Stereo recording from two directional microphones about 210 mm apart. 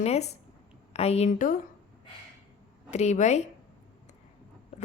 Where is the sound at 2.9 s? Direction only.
35° left (ahead or behind).